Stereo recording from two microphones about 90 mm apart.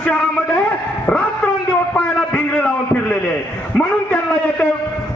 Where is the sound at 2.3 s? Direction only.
15° left (ahead or behind).